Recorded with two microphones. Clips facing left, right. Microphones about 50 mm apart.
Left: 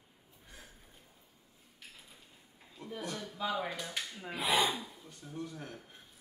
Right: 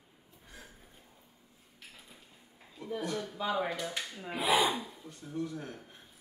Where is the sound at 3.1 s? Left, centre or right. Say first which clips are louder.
Right 2 dB; centre.